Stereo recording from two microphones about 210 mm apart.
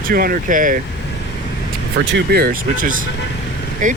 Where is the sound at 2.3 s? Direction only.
45° right (ahead or behind).